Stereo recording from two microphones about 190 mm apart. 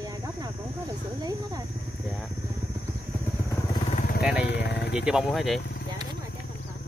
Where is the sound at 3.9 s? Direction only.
45° left (ahead or behind).